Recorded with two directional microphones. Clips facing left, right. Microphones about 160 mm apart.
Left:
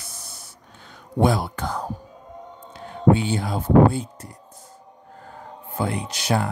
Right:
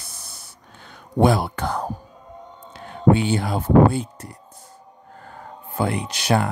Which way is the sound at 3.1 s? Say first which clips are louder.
Right 2 dB; 70° right (ahead or behind).